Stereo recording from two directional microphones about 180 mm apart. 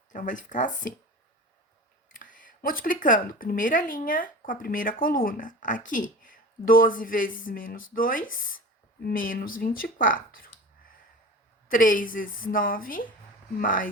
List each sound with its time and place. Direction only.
0.1 s speech: 45° left (ahead or behind)
2.0 s speech: 50° left (ahead or behind)
11.7 s speech: 50° left (ahead or behind)